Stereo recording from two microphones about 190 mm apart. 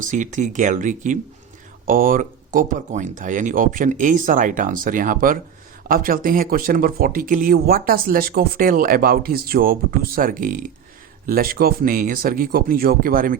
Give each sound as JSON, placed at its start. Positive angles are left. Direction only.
{"t": 0.0, "sound": "speech", "side_deg": -40}